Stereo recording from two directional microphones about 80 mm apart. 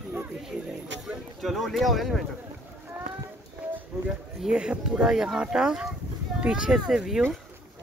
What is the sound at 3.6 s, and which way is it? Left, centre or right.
Clip-clop, centre.